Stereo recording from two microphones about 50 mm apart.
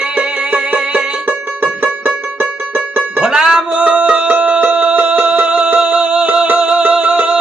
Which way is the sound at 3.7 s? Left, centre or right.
Right.